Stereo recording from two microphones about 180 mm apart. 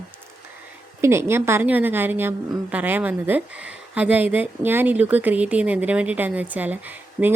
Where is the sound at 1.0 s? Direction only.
15° right (ahead or behind).